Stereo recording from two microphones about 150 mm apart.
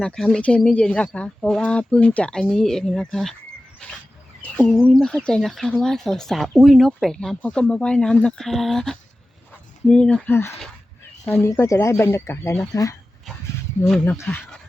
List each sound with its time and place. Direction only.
0.0 s speech: 5° left (ahead or behind)
3.8 s a sound: 5° left (ahead or behind)
4.5 s speech: 5° left (ahead or behind); by 13.0 s 20° left (ahead or behind)
14.0 s speech: 10° left (ahead or behind)